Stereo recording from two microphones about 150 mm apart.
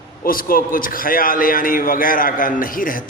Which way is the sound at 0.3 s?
70° left (ahead or behind).